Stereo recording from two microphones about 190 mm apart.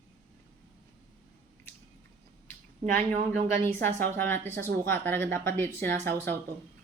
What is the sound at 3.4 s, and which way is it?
Speech, 40° right (ahead or behind).